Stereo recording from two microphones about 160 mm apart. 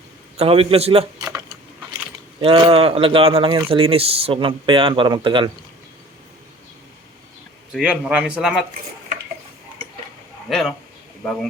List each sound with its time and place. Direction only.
0.3 s speech: 40° right (ahead or behind)
2.4 s speech: 35° right (ahead or behind)
7.7 s a man's voice: 5° right (ahead or behind)
10.5 s a man's voice: centre (ahead or behind)